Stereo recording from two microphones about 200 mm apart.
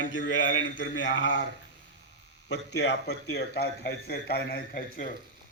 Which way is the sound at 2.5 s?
60° left (ahead or behind).